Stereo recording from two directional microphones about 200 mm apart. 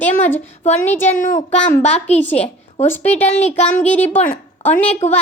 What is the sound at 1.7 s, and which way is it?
Speech, 35° left (ahead or behind).